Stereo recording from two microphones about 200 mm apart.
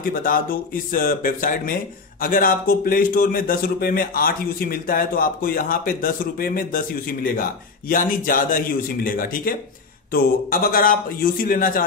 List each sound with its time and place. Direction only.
0.0 s a man's voice: 45° left (ahead or behind)